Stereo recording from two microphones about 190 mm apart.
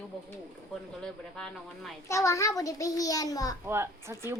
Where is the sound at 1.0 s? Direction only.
5° left (ahead or behind).